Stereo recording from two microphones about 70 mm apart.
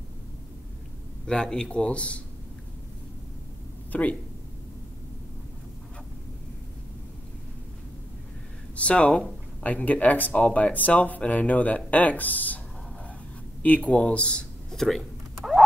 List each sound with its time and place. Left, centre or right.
1.2 s a man's voice: centre
3.9 s speech: left
8.7 s a man's voice: centre
13.6 s a sound: left; by 15.6 s centre